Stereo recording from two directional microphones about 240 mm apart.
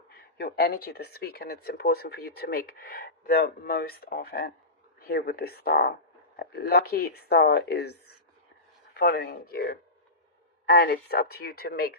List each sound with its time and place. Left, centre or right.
0.1 s speech: left
9.0 s speech: left